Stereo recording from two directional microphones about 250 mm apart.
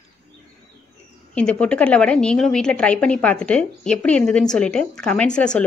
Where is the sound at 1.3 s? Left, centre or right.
Centre.